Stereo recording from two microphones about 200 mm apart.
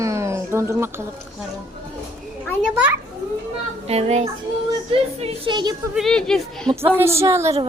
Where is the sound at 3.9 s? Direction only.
30° right (ahead or behind).